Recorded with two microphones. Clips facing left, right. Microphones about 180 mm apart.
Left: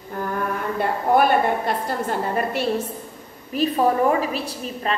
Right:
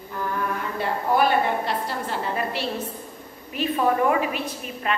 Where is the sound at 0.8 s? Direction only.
50° left (ahead or behind).